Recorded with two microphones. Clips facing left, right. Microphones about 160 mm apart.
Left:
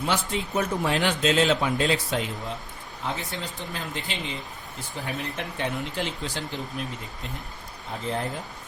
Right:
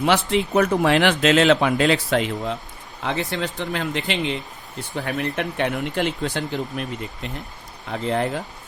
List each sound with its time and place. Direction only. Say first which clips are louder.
0.0 s speech: right 8 dB; 70° right (ahead or behind)
7.9 s speech: right 7 dB; 80° right